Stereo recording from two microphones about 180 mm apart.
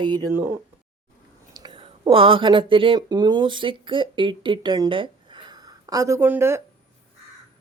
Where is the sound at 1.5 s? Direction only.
25° right (ahead or behind).